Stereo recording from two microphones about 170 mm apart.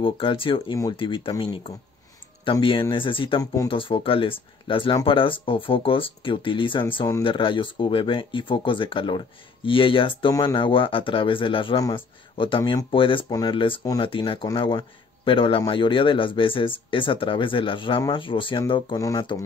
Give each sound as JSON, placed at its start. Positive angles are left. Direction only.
{"t": 0.0, "sound": "speech", "side_deg": 30}